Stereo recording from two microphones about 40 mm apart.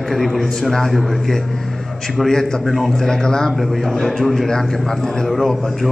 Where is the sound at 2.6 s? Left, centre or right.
Centre.